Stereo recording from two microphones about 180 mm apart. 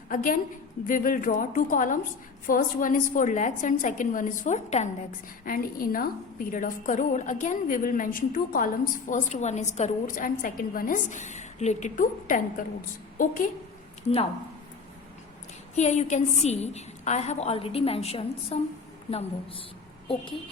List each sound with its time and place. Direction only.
0.1 s a woman's voice: 50° left (ahead or behind)
5.5 s a woman's voice: 50° left (ahead or behind)
15.7 s a woman's voice: 40° left (ahead or behind)